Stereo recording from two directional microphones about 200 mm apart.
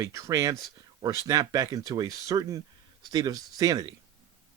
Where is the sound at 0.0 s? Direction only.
15° right (ahead or behind).